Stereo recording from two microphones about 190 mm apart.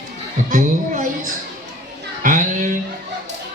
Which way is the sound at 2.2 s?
40° right (ahead or behind).